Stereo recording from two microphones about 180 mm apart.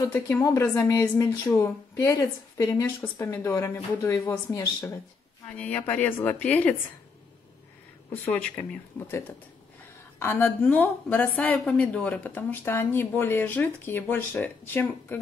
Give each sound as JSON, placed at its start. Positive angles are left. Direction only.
{"t": 0.1, "sound": "a woman's voice", "side_deg": 15}
{"t": 8.1, "sound": "a woman's voice", "side_deg": 5}